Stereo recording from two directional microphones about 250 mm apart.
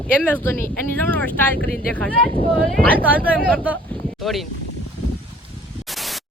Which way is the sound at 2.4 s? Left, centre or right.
Right.